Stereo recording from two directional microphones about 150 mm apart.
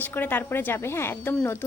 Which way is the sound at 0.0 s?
10° left (ahead or behind).